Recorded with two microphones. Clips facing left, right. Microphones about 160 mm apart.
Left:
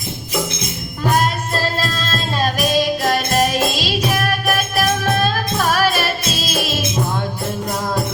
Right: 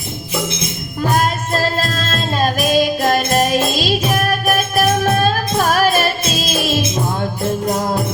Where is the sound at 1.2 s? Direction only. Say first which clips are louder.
Right 2 dB; 45° right (ahead or behind).